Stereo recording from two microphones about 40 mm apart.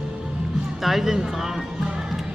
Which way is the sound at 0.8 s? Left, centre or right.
Centre.